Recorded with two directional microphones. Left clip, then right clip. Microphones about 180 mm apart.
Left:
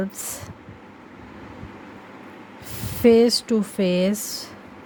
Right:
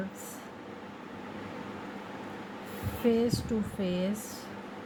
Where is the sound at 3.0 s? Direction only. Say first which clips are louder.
Left 13 dB; 65° left (ahead or behind).